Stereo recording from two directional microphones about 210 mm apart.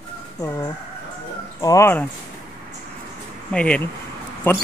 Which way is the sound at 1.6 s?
15° left (ahead or behind).